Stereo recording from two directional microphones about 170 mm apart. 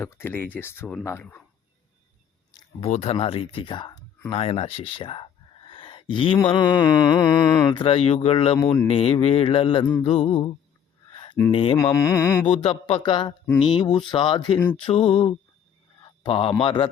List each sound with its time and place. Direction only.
0.0 s speech: 15° left (ahead or behind)
2.8 s speech: 35° left (ahead or behind)
11.1 s a sound: 30° left (ahead or behind)
11.5 s speech: 35° left (ahead or behind)
11.8 s speech: 15° left (ahead or behind)
12.5 s a man's voice: 30° left (ahead or behind)